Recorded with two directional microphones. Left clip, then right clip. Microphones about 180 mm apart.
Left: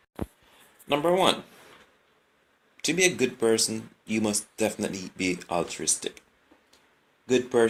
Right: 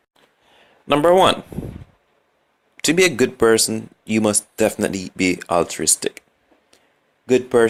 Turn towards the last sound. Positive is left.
turn(degrees=-50)  # may be behind; listen again after turning